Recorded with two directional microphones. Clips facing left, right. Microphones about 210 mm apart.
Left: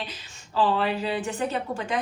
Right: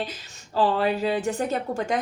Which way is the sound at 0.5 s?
40° right (ahead or behind).